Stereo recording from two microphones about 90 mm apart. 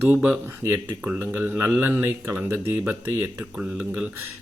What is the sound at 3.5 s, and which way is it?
Speech, 10° right (ahead or behind).